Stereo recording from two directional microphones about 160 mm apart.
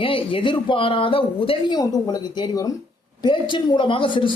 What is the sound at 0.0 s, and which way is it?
A woman's voice, 35° left (ahead or behind).